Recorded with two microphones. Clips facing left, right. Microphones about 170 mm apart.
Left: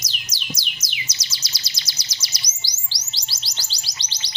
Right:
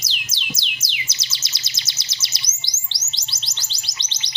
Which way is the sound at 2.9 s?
20° right (ahead or behind).